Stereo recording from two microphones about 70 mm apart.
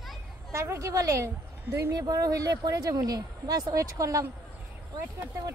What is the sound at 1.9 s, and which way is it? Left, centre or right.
Speech, right.